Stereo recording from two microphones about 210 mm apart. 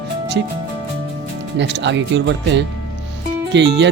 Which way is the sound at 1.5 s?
55° right (ahead or behind).